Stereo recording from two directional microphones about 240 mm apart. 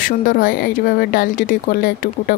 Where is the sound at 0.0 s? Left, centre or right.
Left.